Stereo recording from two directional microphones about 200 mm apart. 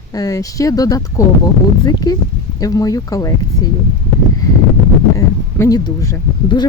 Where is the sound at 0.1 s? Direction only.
15° left (ahead or behind).